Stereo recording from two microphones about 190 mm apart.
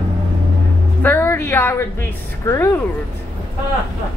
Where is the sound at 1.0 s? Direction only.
10° left (ahead or behind).